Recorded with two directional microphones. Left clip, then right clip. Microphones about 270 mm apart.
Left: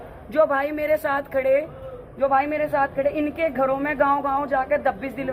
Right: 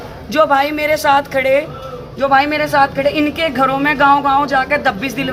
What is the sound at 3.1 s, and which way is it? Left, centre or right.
Speech, centre.